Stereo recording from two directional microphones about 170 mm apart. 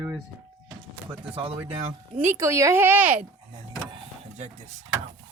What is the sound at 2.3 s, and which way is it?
Speech, 15° right (ahead or behind).